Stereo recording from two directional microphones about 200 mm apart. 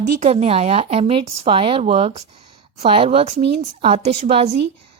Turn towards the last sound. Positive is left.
turn(degrees=-30)  # may be behind; listen again after turning